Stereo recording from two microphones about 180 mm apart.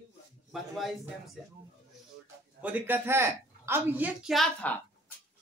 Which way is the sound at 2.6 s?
10° right (ahead or behind).